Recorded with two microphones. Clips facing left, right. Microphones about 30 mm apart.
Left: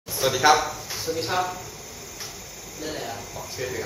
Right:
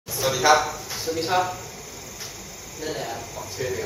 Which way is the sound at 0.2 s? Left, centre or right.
Centre.